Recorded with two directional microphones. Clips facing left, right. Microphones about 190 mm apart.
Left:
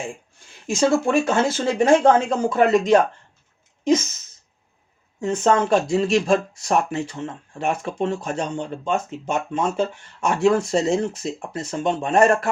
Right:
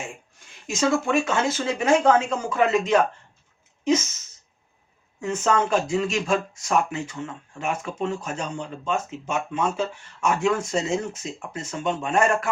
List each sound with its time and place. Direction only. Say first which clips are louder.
0.7 s speech: left 4 dB; 30° left (ahead or behind)
5.2 s speech: left 4 dB; 35° left (ahead or behind)